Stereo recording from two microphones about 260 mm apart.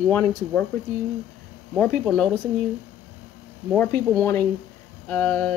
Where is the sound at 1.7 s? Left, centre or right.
Centre.